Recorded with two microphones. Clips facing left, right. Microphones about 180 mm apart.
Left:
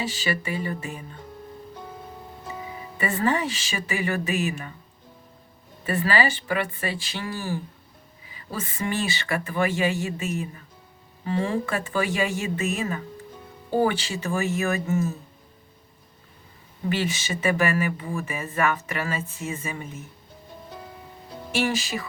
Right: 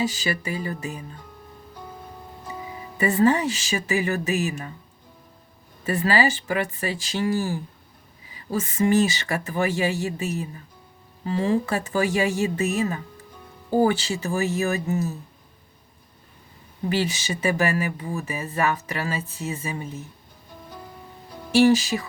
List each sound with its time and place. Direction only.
0.0 s speech: 40° right (ahead or behind)
3.0 s speech: 40° right (ahead or behind)
5.8 s speech: 40° right (ahead or behind)
16.9 s speech: 40° right (ahead or behind)
21.5 s speech: 40° right (ahead or behind)